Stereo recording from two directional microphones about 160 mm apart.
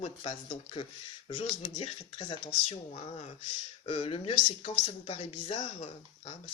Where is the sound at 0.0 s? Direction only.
40° left (ahead or behind).